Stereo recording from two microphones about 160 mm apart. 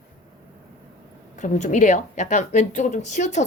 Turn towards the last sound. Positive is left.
turn(degrees=50)  # may be behind; listen again after turning